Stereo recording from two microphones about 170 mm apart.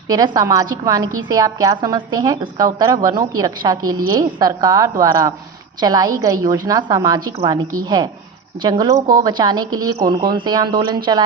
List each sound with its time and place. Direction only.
0.1 s a woman's voice: 20° right (ahead or behind)